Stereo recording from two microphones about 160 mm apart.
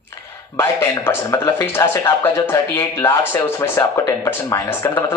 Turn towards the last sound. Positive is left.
turn(degrees=15)  # may be behind; listen again after turning